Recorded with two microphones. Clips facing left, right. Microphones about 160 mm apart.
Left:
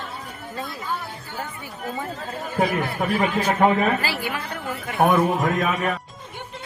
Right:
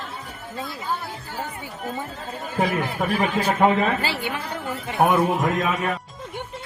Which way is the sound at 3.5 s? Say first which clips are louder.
Even; 15° right (ahead or behind).